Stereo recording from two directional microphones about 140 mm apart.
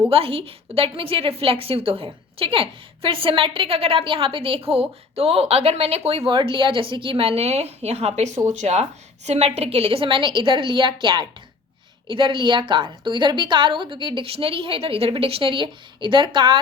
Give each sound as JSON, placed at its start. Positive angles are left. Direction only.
{"t": 0.1, "sound": "a woman's voice", "side_deg": -40}